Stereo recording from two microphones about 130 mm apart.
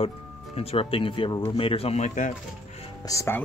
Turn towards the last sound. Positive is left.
turn(degrees=20)  # may be behind; listen again after turning